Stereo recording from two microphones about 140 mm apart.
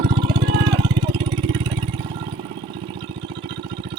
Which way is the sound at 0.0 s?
35° right (ahead or behind).